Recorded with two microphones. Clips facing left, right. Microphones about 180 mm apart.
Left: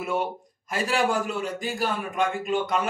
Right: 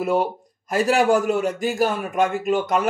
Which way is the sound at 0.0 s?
35° right (ahead or behind).